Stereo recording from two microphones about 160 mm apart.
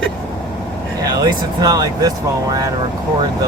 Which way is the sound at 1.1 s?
25° right (ahead or behind).